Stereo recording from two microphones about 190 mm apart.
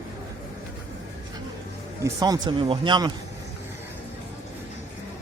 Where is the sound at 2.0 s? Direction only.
20° right (ahead or behind).